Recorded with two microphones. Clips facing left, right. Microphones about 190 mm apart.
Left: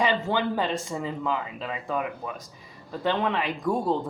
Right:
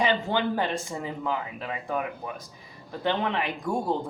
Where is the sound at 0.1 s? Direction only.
25° right (ahead or behind).